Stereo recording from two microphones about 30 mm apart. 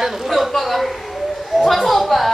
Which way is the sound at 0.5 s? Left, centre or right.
Centre.